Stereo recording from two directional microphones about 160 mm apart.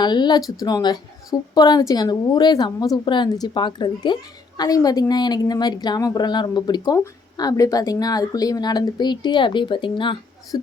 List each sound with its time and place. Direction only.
0.0 s a woman's voice: 30° left (ahead or behind)